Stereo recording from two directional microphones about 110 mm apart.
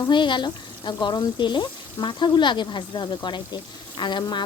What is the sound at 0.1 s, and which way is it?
A woman's voice, 45° left (ahead or behind).